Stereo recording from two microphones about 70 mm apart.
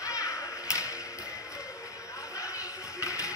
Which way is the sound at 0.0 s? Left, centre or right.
Left.